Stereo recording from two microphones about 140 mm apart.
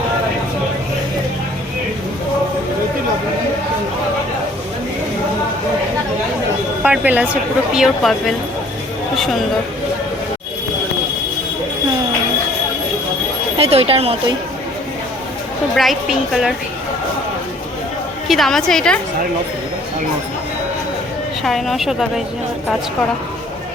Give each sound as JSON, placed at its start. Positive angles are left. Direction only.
{"t": 6.8, "sound": "a woman's voice", "side_deg": -10}
{"t": 13.6, "sound": "speech", "side_deg": -45}
{"t": 15.7, "sound": "a woman's voice", "side_deg": 0}
{"t": 18.3, "sound": "a woman's voice", "side_deg": 0}
{"t": 21.4, "sound": "a woman's voice", "side_deg": 0}